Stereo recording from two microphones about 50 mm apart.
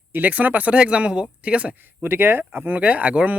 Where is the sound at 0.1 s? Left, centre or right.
Right.